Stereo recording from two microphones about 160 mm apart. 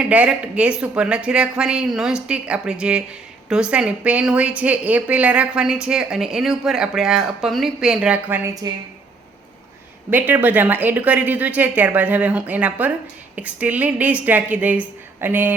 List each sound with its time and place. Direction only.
0.0 s a woman's voice: 10° right (ahead or behind)
8.6 s speech: 25° right (ahead or behind)
10.1 s a woman's voice: 10° right (ahead or behind)